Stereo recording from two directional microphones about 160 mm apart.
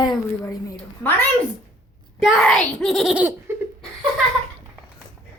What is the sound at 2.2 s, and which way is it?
A child's voice, 5° left (ahead or behind).